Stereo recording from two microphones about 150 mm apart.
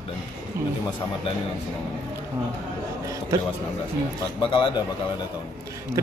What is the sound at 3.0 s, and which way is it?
Speech, 20° right (ahead or behind).